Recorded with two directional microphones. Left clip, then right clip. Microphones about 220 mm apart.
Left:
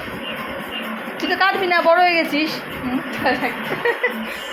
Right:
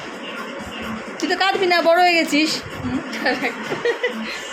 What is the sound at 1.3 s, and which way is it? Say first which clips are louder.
A woman's voice: even; 20° right (ahead or behind).